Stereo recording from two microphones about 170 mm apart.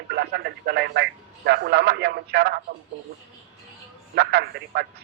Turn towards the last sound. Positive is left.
turn(degrees=-70)  # may be behind; listen again after turning